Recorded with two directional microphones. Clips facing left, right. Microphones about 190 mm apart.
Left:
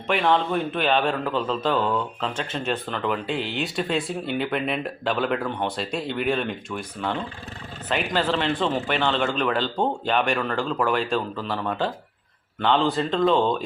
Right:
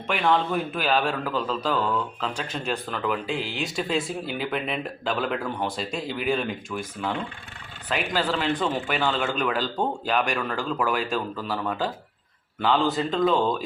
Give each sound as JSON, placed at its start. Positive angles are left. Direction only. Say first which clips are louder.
{"t": 0.1, "sound": "speech", "louder": "left 2 dB", "side_deg": 0}